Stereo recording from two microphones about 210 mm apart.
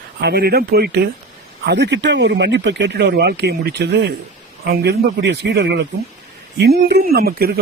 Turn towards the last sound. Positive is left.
turn(degrees=-45)  # may be behind; listen again after turning